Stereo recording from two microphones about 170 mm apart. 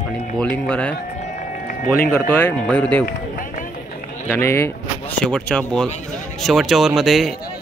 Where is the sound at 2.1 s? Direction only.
10° left (ahead or behind).